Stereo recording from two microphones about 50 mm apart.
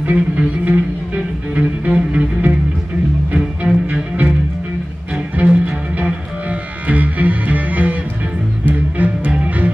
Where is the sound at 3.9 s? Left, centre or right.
Right.